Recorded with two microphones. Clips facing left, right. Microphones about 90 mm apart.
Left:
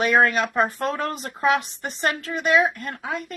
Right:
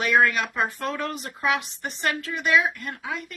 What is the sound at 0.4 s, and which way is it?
Speech, 50° left (ahead or behind).